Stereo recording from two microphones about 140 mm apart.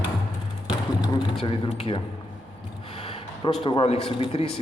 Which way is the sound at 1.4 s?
40° left (ahead or behind).